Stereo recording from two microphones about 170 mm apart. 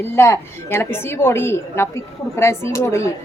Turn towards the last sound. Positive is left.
turn(degrees=15)  # may be behind; listen again after turning